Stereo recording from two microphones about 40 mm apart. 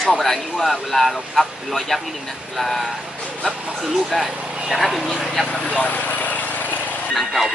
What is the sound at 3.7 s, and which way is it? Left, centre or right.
Speech, centre.